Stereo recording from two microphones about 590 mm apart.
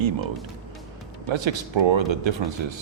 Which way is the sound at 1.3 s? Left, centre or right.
Right.